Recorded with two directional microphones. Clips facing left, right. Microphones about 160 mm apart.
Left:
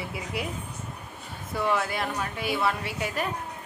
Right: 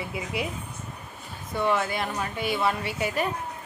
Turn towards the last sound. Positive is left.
turn(degrees=0)  # may be behind; listen again after turning